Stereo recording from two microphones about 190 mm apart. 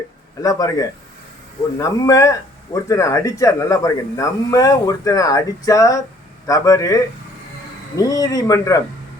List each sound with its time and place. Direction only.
0.4 s speech: 20° left (ahead or behind)